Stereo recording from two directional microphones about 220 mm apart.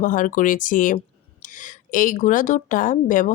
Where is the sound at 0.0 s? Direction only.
35° left (ahead or behind).